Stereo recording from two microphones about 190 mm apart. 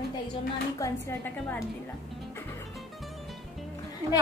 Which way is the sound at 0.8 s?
15° left (ahead or behind).